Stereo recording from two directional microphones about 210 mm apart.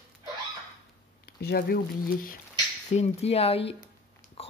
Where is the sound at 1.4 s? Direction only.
45° left (ahead or behind).